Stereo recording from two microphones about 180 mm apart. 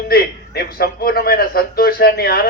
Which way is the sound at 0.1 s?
55° left (ahead or behind).